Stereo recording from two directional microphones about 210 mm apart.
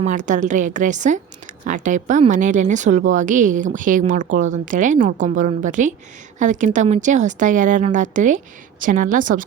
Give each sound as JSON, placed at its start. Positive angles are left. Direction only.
{"t": 0.0, "sound": "speech", "side_deg": -35}